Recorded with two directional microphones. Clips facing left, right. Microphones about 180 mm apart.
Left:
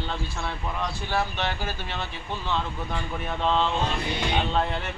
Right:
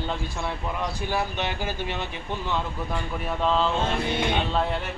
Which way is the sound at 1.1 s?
15° right (ahead or behind).